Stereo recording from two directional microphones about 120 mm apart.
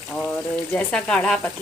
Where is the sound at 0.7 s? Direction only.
10° left (ahead or behind).